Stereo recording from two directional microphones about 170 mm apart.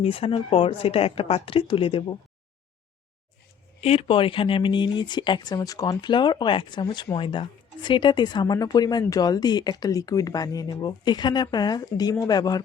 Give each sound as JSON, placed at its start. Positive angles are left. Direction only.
{"t": 0.0, "sound": "speech", "side_deg": 35}
{"t": 3.8, "sound": "speech", "side_deg": 35}